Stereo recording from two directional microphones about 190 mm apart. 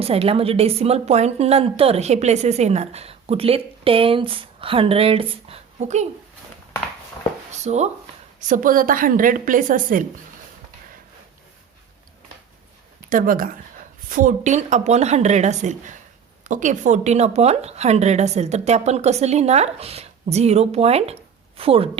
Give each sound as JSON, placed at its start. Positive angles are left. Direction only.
{"t": 0.0, "sound": "a woman's voice", "side_deg": -30}
{"t": 7.6, "sound": "a woman's voice", "side_deg": -35}
{"t": 13.1, "sound": "a woman's voice", "side_deg": -45}